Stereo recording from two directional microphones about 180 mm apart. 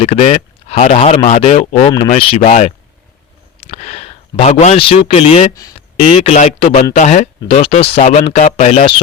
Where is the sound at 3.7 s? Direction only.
35° left (ahead or behind).